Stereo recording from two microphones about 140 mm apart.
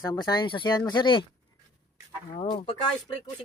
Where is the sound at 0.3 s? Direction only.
35° left (ahead or behind).